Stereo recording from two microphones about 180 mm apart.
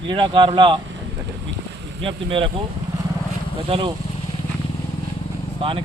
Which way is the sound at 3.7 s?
30° right (ahead or behind).